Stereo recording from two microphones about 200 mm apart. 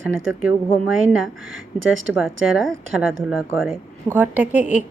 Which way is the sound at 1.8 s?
75° right (ahead or behind).